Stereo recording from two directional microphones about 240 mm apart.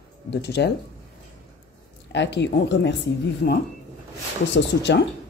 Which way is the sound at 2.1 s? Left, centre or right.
Left.